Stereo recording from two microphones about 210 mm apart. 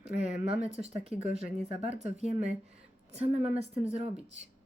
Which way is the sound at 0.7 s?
30° right (ahead or behind).